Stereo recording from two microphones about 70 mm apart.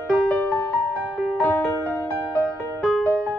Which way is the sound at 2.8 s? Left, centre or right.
Centre.